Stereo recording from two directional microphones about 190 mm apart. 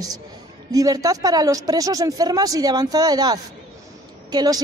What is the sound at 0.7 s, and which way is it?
A man's voice, 20° right (ahead or behind).